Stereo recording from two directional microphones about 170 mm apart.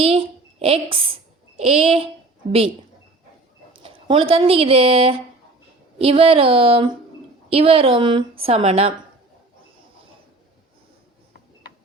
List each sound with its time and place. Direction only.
0.6 s a child's voice: 30° right (ahead or behind)
3.8 s a woman's voice: 30° right (ahead or behind)